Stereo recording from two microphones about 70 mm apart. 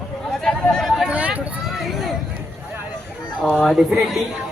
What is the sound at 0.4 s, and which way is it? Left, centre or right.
Chatter, centre.